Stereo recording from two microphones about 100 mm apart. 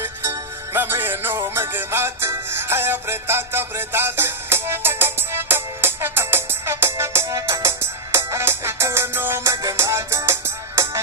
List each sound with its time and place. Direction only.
0.0 s music: 25° right (ahead or behind)